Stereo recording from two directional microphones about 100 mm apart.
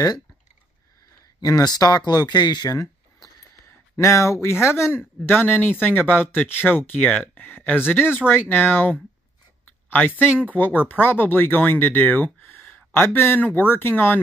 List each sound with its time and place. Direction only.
1.4 s speech: 40° left (ahead or behind); by 14.2 s 20° left (ahead or behind)